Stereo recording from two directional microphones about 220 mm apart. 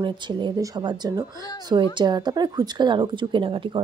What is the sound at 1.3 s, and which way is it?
Speech, 15° left (ahead or behind).